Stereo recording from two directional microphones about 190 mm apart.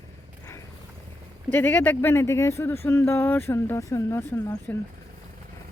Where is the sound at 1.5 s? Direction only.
10° left (ahead or behind).